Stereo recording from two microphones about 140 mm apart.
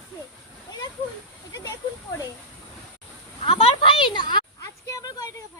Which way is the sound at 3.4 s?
40° left (ahead or behind).